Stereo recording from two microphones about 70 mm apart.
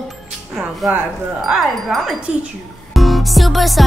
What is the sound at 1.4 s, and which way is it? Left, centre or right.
Speech, centre.